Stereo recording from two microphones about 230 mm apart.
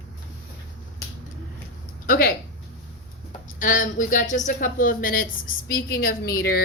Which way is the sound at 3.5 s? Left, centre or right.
Left.